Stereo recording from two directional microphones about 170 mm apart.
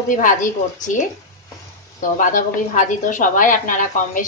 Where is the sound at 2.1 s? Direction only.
50° left (ahead or behind).